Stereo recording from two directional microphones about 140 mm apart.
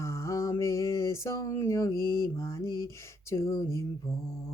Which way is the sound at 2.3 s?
20° left (ahead or behind).